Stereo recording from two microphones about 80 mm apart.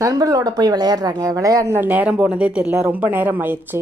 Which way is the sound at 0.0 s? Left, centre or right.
Right.